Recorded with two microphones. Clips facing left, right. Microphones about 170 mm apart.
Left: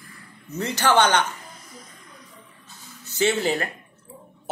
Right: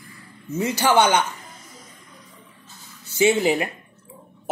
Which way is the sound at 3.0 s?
10° right (ahead or behind).